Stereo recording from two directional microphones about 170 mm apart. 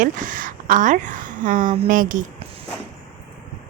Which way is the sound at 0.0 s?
50° right (ahead or behind).